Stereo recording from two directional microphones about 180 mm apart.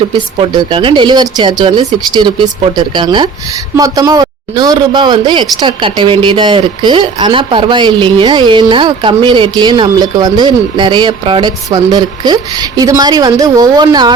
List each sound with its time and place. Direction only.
0.1 s speech: 25° right (ahead or behind)